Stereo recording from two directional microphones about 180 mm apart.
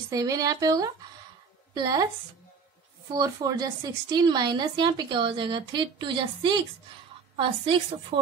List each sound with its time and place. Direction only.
0.1 s a woman's voice: 20° right (ahead or behind)
3.1 s a woman's voice: 25° right (ahead or behind)